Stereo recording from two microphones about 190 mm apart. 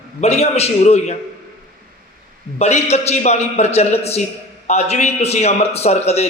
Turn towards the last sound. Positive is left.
turn(degrees=35)  # may be behind; listen again after turning